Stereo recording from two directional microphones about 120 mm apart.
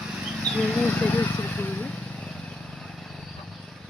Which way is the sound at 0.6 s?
10° left (ahead or behind).